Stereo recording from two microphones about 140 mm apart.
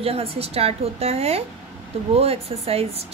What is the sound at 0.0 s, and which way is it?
A woman's voice, 45° right (ahead or behind).